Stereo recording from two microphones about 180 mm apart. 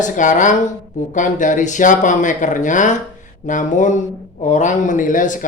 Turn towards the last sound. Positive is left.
turn(degrees=45)  # may be behind; listen again after turning